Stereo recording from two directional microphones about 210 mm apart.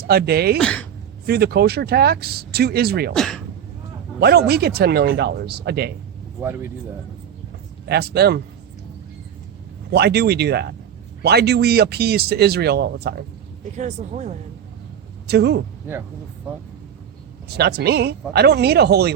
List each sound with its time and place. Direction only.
0.0 s speech: 50° right (ahead or behind)
0.6 s speech: 5° left (ahead or behind)
1.3 s speech: 50° right (ahead or behind)
3.2 s speech: 5° left (ahead or behind)
4.2 s speech: 50° right (ahead or behind)
6.4 s speech: 10° right (ahead or behind)
7.9 s speech: 50° right (ahead or behind)
9.9 s speech: 50° right (ahead or behind)
13.7 s speech: 35° right (ahead or behind)
15.3 s speech: 50° right (ahead or behind)
17.5 s speech: 50° right (ahead or behind)